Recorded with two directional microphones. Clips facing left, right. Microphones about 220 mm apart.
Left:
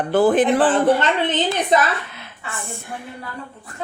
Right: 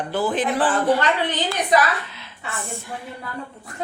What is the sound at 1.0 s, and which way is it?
Speech, 25° left (ahead or behind).